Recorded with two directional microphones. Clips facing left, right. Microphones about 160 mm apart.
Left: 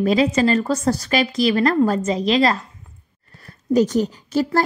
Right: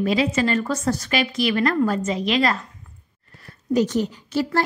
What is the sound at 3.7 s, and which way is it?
Speech, 40° left (ahead or behind).